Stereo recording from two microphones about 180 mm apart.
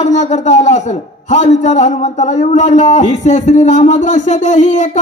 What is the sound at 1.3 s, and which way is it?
A man's voice, 40° left (ahead or behind).